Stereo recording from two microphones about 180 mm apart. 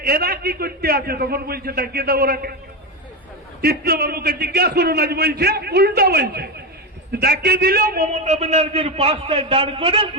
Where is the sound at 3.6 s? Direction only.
60° right (ahead or behind).